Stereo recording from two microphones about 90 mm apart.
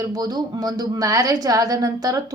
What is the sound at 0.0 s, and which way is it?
A woman's voice, 45° right (ahead or behind).